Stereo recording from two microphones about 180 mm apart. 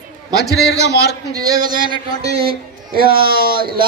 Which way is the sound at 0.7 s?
70° left (ahead or behind).